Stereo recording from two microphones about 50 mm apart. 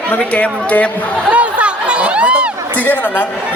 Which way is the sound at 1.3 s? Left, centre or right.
Right.